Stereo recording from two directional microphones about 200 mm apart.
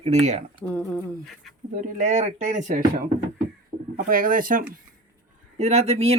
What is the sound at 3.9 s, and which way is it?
Speech, 45° right (ahead or behind).